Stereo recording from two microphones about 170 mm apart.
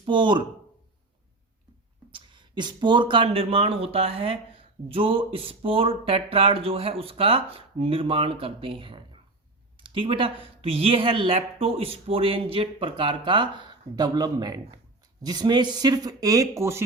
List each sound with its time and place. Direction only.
0.0 s speech: 30° right (ahead or behind)
2.0 s speech: 30° right (ahead or behind)